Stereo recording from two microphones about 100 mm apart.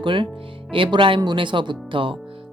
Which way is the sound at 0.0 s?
55° right (ahead or behind).